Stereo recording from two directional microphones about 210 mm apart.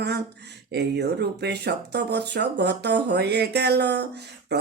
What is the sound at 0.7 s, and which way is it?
Speech, 55° right (ahead or behind).